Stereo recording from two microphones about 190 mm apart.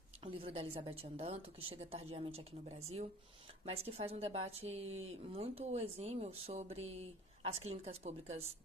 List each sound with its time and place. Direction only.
0.3 s a woman's voice: 30° right (ahead or behind)